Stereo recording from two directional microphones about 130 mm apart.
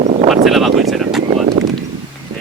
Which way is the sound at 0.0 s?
60° right (ahead or behind).